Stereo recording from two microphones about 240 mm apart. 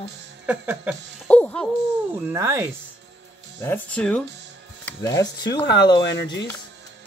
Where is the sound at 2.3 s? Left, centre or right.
Centre.